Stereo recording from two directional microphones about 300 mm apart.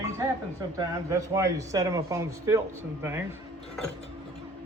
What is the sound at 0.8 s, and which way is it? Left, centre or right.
Speech, centre.